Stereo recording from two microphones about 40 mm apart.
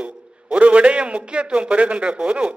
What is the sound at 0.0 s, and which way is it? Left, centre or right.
A man's voice, right.